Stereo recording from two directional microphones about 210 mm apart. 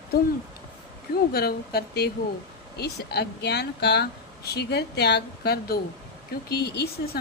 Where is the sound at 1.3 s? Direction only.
50° left (ahead or behind).